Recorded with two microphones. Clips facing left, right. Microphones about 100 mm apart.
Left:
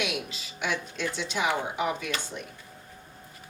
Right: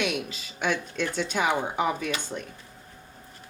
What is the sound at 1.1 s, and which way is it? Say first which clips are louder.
Speech: right 3 dB; 45° right (ahead or behind).